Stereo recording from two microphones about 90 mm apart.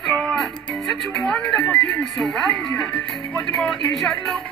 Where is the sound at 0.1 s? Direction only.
5° left (ahead or behind).